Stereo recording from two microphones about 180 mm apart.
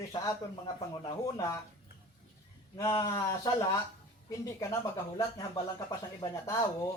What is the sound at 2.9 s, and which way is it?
Speech, 20° left (ahead or behind).